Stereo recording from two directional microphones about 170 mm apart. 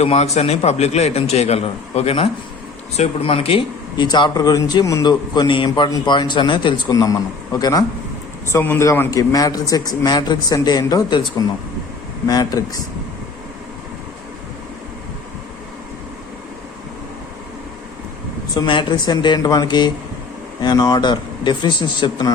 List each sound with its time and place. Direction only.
0.0 s a man's voice: 40° left (ahead or behind); by 12.8 s 20° left (ahead or behind)
18.5 s speech: 25° left (ahead or behind)